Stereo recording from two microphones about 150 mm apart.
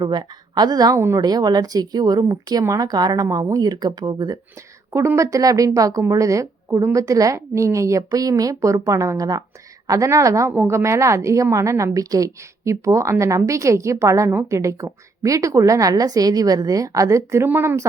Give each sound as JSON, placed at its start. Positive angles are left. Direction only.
{"t": 0.0, "sound": "a woman's voice", "side_deg": -30}
{"t": 4.9, "sound": "a woman's voice", "side_deg": -15}